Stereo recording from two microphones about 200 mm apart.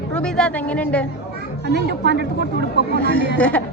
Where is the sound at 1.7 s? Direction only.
55° right (ahead or behind).